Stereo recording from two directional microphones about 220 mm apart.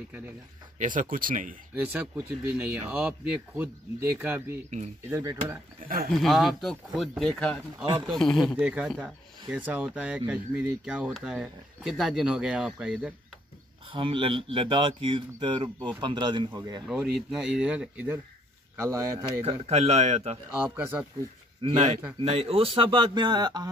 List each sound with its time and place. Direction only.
0.7 s speech: 35° right (ahead or behind)
1.9 s speech: 10° right (ahead or behind)
5.8 s speech: 40° right (ahead or behind)
6.1 s speech: centre (ahead or behind)
13.9 s speech: 25° right (ahead or behind)
16.8 s speech: centre (ahead or behind)
19.4 s speech: 25° right (ahead or behind)
20.6 s speech: 10° right (ahead or behind)
21.6 s speech: 25° right (ahead or behind)